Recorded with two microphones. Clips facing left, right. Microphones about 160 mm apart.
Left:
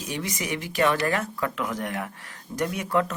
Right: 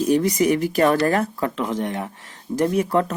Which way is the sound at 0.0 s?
40° right (ahead or behind).